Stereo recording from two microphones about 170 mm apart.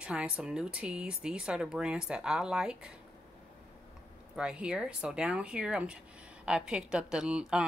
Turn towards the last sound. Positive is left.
turn(degrees=-5)  # may be behind; listen again after turning